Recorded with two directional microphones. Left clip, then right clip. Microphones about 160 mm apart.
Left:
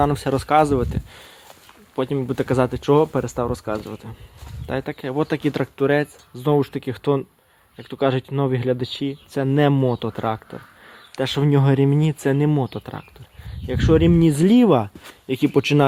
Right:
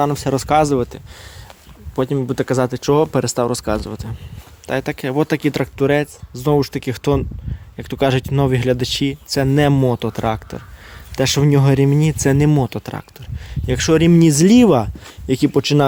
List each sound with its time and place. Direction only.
0.0 s speech: 10° right (ahead or behind)
0.3 s speech: 30° right (ahead or behind)
0.7 s speech: 15° right (ahead or behind); by 3.1 s 35° right (ahead or behind)
3.1 s speech: 50° right (ahead or behind)
5.4 s speech: 20° right (ahead or behind)
6.7 s speech: 30° right (ahead or behind)
9.3 s speech: 30° right (ahead or behind)
12.5 s speech: 40° right (ahead or behind)
13.7 s speech: 50° right (ahead or behind); by 14.8 s 25° right (ahead or behind)
15.3 s speech: 15° right (ahead or behind)